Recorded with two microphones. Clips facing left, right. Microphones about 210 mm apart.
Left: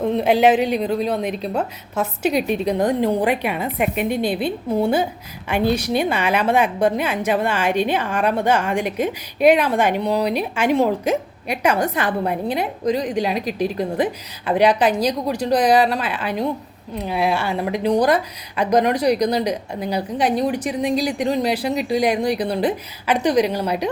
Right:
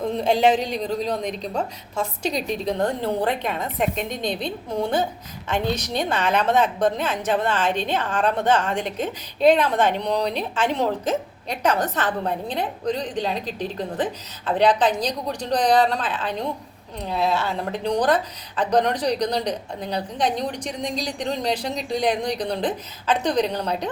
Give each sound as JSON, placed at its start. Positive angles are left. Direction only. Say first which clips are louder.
{"t": 0.2, "sound": "a woman's voice", "louder": "left 3 dB", "side_deg": 5}